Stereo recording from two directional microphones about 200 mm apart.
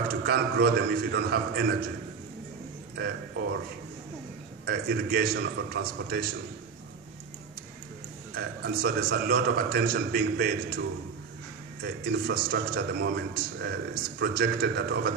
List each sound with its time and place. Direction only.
0.1 s a man's voice: 50° right (ahead or behind)
4.6 s a man's voice: 55° right (ahead or behind)
8.4 s a man's voice: 55° right (ahead or behind)